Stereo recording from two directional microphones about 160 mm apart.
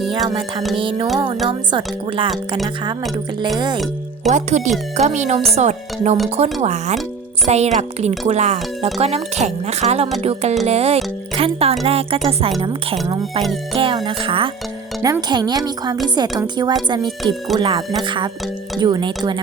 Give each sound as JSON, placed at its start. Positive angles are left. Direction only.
{"t": 0.3, "sound": "speech", "side_deg": -30}
{"t": 3.0, "sound": "speech", "side_deg": 0}
{"t": 4.3, "sound": "speech", "side_deg": -45}